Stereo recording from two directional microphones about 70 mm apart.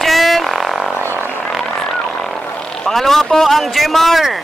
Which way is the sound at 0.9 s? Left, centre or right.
Right.